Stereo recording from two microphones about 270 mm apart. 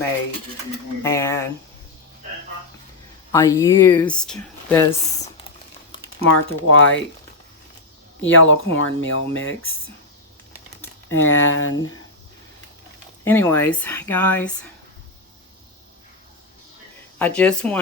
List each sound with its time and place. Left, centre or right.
1.0 s speech: centre
3.3 s speech: centre
6.2 s speech: left
8.2 s speech: left
11.1 s speech: left
13.2 s speech: centre
17.2 s speech: centre